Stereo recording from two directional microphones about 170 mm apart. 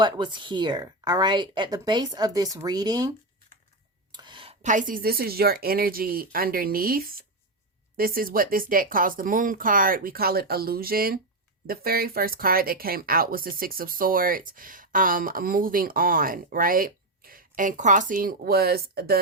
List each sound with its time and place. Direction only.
0.0 s speech: 30° right (ahead or behind)
4.1 s a sound: 25° right (ahead or behind)
4.6 s speech: 50° right (ahead or behind); by 19.2 s 65° right (ahead or behind)